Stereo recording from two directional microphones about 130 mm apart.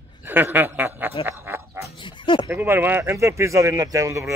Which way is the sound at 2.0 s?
35° left (ahead or behind).